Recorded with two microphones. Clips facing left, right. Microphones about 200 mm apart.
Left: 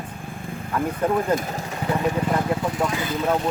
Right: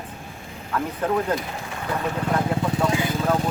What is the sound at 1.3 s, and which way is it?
Speech, 45° left (ahead or behind).